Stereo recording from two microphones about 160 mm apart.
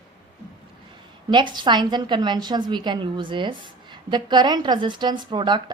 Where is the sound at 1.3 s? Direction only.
30° right (ahead or behind).